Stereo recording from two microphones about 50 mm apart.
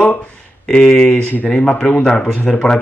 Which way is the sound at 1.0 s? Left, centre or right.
Left.